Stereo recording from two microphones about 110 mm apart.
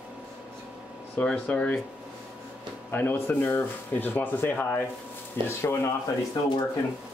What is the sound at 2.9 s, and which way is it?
Speech, 15° left (ahead or behind).